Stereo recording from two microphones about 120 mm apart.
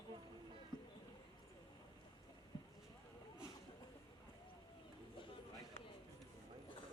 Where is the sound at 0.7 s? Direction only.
35° left (ahead or behind).